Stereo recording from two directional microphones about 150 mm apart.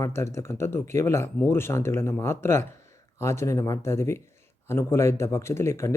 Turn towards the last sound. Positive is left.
turn(degrees=15)  # may be behind; listen again after turning